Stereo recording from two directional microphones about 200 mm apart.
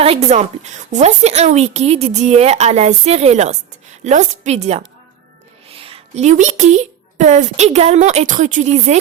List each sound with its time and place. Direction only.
0.0 s a woman's voice: 30° right (ahead or behind)